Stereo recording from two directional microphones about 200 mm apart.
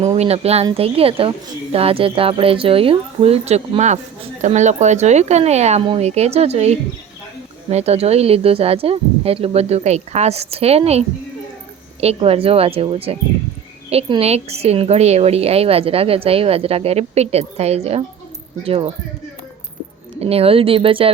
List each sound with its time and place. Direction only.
0.1 s speech: 30° right (ahead or behind)
20.1 s speech: 30° right (ahead or behind)